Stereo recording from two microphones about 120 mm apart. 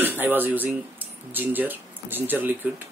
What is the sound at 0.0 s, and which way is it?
Speech, 15° right (ahead or behind).